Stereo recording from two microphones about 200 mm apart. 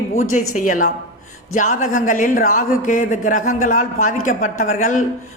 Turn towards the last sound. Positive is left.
turn(degrees=35)  # may be behind; listen again after turning